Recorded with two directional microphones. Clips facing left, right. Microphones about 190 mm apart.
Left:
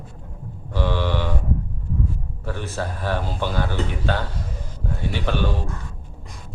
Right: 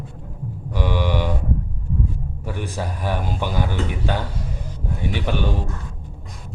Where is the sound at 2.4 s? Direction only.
15° right (ahead or behind).